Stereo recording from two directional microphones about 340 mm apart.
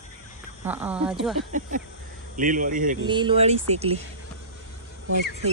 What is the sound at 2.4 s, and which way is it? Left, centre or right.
Speech, right.